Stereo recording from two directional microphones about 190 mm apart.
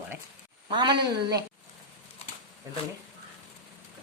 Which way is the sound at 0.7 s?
25° right (ahead or behind).